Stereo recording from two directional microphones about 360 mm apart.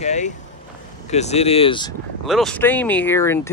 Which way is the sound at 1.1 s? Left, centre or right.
Centre.